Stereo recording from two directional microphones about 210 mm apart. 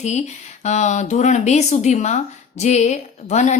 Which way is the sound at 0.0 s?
35° left (ahead or behind).